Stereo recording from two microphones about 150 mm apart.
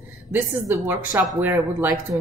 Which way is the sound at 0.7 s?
20° right (ahead or behind).